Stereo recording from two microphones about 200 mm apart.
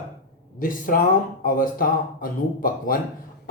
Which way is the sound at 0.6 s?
45° left (ahead or behind).